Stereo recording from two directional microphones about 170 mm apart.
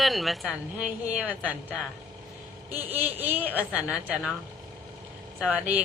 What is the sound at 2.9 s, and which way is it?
Speech, 10° right (ahead or behind).